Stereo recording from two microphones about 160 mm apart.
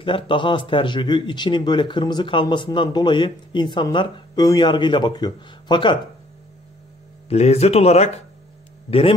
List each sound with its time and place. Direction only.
0.0 s speech: 30° left (ahead or behind)
7.2 s speech: 40° left (ahead or behind)